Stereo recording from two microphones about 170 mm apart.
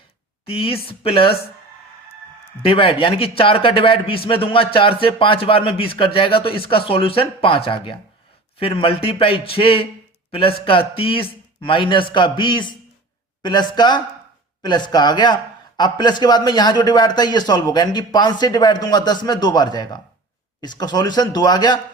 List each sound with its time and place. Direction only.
0.4 s a man's voice: 35° left (ahead or behind)
2.6 s a man's voice: 30° left (ahead or behind)